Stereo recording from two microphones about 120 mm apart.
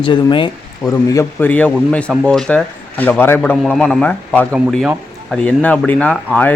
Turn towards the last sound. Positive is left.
turn(degrees=15)  # may be behind; listen again after turning